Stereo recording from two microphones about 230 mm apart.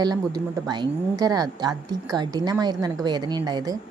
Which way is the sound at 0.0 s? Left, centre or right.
Centre.